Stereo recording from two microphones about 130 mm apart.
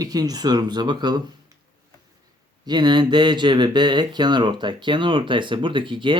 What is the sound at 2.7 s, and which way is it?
Speech, 35° right (ahead or behind).